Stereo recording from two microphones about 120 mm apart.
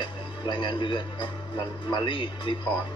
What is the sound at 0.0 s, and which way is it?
Speech, 40° left (ahead or behind).